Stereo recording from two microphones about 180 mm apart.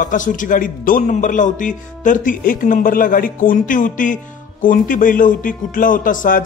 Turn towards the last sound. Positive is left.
turn(degrees=50)  # may be behind; listen again after turning